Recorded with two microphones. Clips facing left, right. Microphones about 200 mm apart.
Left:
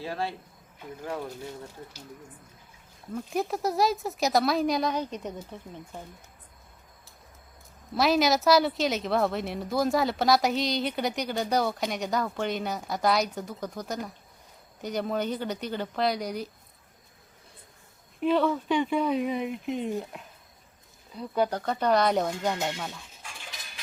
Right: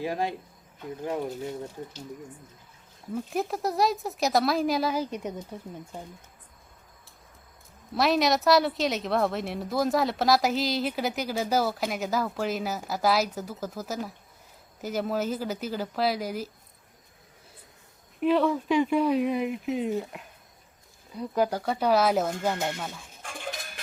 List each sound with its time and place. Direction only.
0.0 s speech: 15° right (ahead or behind)
3.1 s a woman's voice: 5° right (ahead or behind)
7.9 s a woman's voice: centre (ahead or behind)
18.2 s a woman's voice: centre (ahead or behind)
21.2 s a woman's voice: 5° right (ahead or behind)
23.2 s cutlery: 50° right (ahead or behind)